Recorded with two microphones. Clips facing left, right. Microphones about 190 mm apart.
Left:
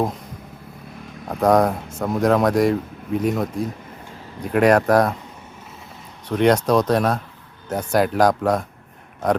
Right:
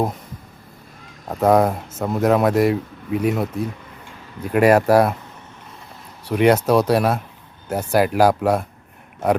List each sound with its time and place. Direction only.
1.4 s speech: 5° right (ahead or behind)
6.2 s speech: 10° right (ahead or behind)